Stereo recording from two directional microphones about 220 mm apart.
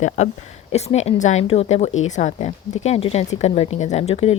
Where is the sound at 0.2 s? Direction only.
30° left (ahead or behind).